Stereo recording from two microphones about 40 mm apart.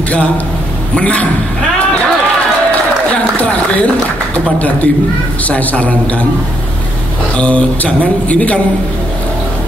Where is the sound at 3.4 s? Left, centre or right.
Left.